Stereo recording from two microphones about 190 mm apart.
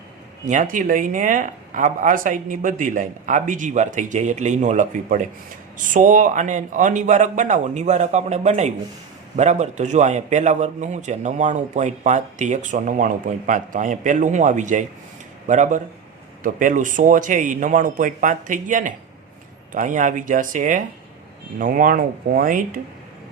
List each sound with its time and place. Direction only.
0.4 s a man's voice: 40° right (ahead or behind)